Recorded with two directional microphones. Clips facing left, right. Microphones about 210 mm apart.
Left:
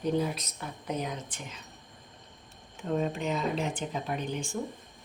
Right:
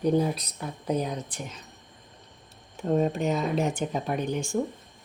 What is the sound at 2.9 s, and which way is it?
Speech, 45° right (ahead or behind).